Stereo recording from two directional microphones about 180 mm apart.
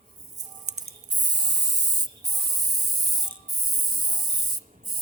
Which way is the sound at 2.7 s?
25° right (ahead or behind).